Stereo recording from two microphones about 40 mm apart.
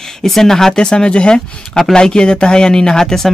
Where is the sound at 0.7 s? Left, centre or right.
Left.